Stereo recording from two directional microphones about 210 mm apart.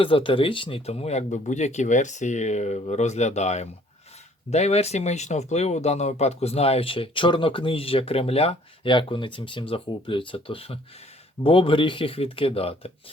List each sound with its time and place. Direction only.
0.0 s speech: 25° left (ahead or behind)